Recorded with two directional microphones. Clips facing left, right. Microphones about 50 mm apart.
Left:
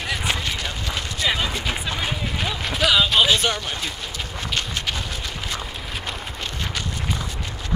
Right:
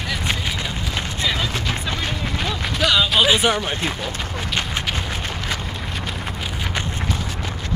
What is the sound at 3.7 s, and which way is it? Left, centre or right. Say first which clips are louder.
Speech: right 5 dB; right.